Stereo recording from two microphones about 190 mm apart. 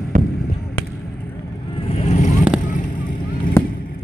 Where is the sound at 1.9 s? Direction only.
35° left (ahead or behind).